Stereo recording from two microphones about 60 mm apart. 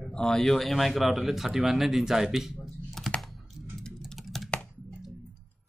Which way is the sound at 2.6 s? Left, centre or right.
Centre.